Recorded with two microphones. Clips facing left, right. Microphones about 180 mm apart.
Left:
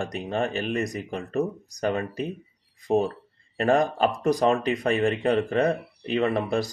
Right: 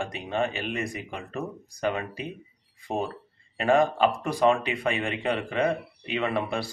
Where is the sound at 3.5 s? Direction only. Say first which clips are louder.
Even; 40° left (ahead or behind).